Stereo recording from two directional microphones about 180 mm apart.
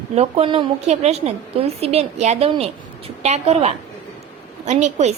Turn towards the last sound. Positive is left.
turn(degrees=-40)  # may be behind; listen again after turning